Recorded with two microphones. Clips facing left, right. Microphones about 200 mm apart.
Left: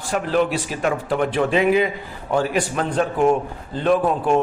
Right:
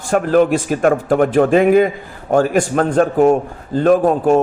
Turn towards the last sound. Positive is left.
turn(degrees=-45)  # may be behind; listen again after turning